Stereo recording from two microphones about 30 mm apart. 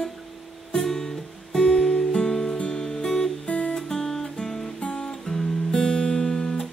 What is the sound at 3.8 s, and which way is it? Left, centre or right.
Music, centre.